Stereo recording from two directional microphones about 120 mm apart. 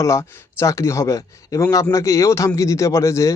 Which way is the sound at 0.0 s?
25° left (ahead or behind).